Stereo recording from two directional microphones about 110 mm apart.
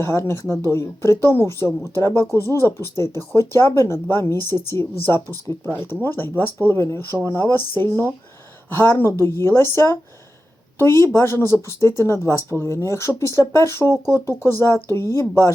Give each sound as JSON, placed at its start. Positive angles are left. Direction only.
{"t": 0.0, "sound": "speech", "side_deg": 25}